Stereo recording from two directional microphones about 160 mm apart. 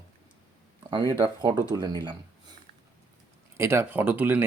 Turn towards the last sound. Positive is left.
turn(degrees=-10)  # may be behind; listen again after turning